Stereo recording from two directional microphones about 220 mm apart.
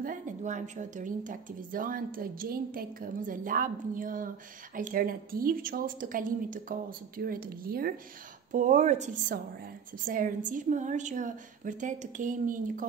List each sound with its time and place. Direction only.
0.0 s a woman's voice: 35° right (ahead or behind)